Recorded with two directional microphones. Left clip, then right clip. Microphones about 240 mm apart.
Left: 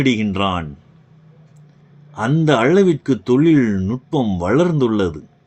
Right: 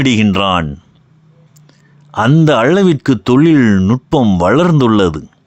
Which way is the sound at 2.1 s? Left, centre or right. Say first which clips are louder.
Right 6 dB; right.